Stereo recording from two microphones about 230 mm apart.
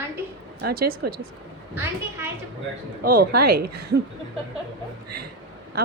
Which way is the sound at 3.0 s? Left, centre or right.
Right.